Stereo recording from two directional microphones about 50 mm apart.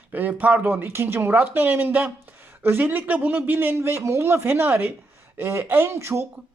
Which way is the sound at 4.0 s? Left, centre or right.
Right.